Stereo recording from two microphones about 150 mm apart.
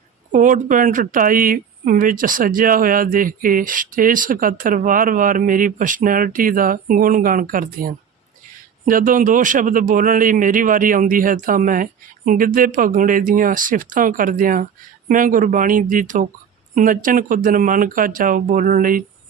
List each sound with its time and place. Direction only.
0.3 s a man's voice: 60° right (ahead or behind)